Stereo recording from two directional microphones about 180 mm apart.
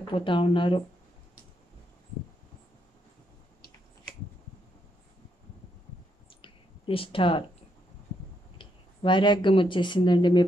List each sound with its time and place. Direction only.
0.0 s speech: 30° left (ahead or behind)
6.4 s a sound: 30° left (ahead or behind)
8.5 s speech: 25° left (ahead or behind)